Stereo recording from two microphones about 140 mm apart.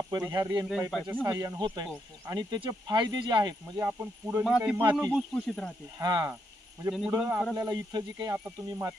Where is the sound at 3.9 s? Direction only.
15° right (ahead or behind).